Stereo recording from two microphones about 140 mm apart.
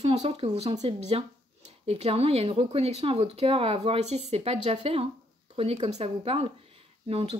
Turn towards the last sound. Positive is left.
turn(degrees=-45)  # may be behind; listen again after turning